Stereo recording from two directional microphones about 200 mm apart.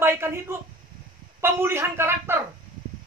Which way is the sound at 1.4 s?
10° right (ahead or behind).